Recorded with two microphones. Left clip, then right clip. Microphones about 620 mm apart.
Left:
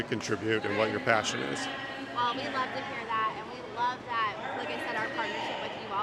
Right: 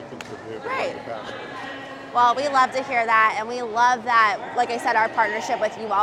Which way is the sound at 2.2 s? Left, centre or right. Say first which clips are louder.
Right 13 dB; right.